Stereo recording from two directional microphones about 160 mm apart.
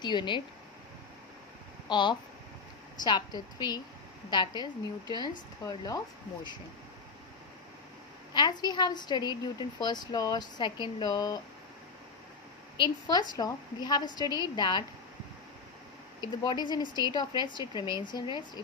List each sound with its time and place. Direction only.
0.0 s a woman's voice: 30° left (ahead or behind)
1.9 s a woman's voice: 30° left (ahead or behind)
8.3 s a woman's voice: 25° left (ahead or behind)
12.7 s a woman's voice: 25° left (ahead or behind)
16.4 s a woman's voice: 25° left (ahead or behind)